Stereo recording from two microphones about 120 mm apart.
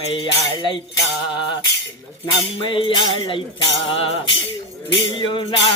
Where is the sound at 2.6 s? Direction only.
45° left (ahead or behind).